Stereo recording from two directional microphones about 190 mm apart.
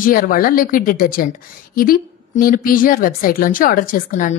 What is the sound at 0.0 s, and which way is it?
A woman's voice, 45° left (ahead or behind).